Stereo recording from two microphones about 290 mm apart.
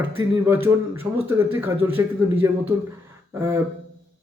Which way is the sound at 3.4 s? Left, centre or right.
Centre.